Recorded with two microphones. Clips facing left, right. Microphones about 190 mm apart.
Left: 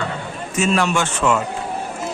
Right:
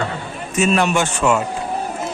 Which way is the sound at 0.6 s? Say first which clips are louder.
Right 2 dB; 15° right (ahead or behind).